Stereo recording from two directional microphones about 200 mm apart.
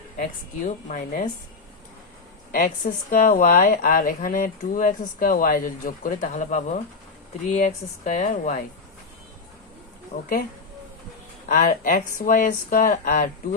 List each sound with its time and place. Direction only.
0.2 s speech: 40° left (ahead or behind)
2.5 s speech: 40° left (ahead or behind)
11.4 s speech: 40° left (ahead or behind)